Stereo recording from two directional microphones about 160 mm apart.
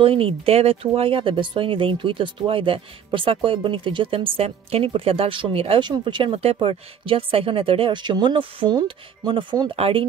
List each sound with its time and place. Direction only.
0.0 s speech: 35° right (ahead or behind)